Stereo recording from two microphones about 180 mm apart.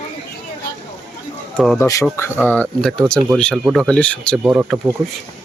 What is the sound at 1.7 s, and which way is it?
Speech, 20° left (ahead or behind).